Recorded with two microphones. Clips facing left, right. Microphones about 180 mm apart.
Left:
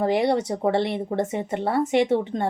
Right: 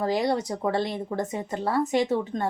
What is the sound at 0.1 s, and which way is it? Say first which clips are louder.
Speech: left 2 dB; 65° left (ahead or behind).